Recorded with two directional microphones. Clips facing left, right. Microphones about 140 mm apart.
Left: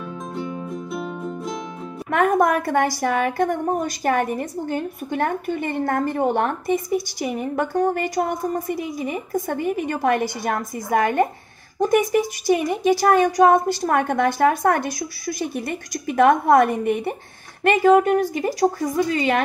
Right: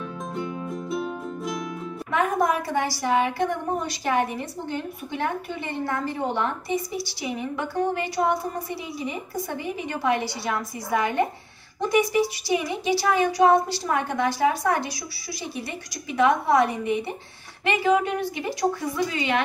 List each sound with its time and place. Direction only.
0.9 s music: centre (ahead or behind)
2.0 s a woman's voice: 55° left (ahead or behind)